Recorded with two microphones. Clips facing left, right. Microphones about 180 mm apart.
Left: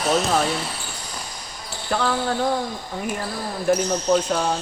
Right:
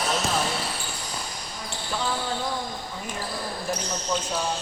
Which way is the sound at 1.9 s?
65° left (ahead or behind).